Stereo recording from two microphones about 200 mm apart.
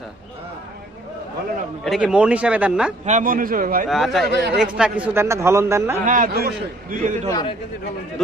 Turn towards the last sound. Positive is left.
turn(degrees=20)  # may be behind; listen again after turning